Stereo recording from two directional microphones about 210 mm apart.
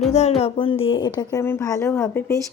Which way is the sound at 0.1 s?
30° left (ahead or behind).